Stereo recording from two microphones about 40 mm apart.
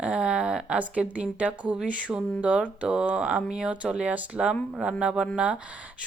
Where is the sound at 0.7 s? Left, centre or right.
Right.